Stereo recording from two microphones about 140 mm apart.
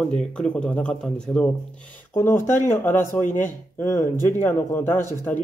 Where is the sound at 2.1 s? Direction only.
20° left (ahead or behind).